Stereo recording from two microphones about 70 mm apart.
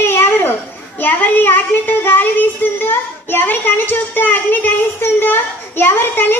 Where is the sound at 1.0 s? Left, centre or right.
Left.